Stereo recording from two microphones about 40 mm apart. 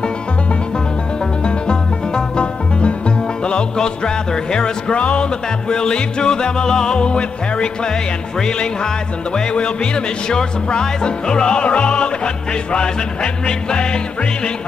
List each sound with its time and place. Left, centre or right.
1.4 s music: left